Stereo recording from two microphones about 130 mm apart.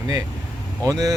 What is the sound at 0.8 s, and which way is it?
Speech, 25° right (ahead or behind).